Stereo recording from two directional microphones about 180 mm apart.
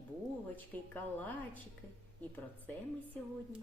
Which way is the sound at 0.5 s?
10° left (ahead or behind).